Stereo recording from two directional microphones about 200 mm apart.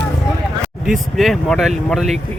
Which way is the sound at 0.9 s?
Centre (ahead or behind).